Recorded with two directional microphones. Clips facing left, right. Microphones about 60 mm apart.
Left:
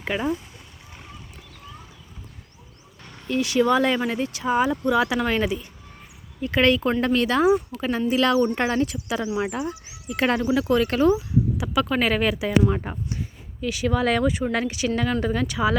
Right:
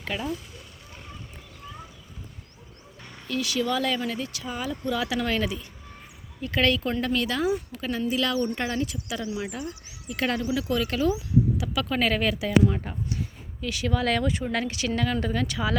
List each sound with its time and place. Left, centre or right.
0.0 s speech: left
3.0 s vehicle: centre
3.2 s speech: left
9.6 s speech: left
11.5 s speech: left
12.7 s speech: left
13.6 s speech: centre